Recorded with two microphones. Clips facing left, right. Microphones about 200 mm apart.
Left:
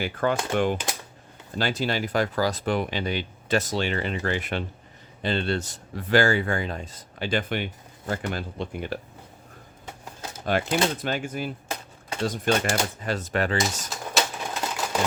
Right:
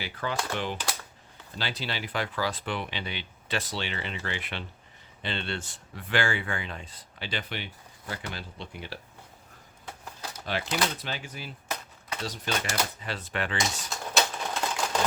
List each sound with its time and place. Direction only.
0.0 s speech: 50° left (ahead or behind)
10.2 s keys jangling: 25° left (ahead or behind)
10.4 s speech: 50° left (ahead or behind)
11.7 s dishes: 30° left (ahead or behind)
12.2 s speech: 50° left (ahead or behind)
14.1 s typewriter: 5° left (ahead or behind)